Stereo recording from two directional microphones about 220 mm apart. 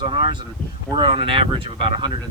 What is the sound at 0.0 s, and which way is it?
Speech, 20° right (ahead or behind).